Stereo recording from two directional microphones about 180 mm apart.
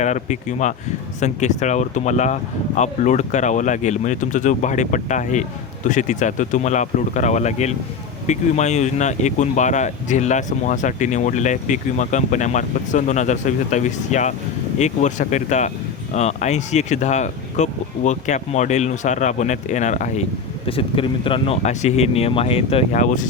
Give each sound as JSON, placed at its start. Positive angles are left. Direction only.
{"t": 0.0, "sound": "speech", "side_deg": 40}
{"t": 20.7, "sound": "speech", "side_deg": 30}